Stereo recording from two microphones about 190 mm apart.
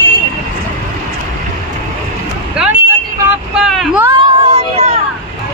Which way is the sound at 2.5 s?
5° right (ahead or behind).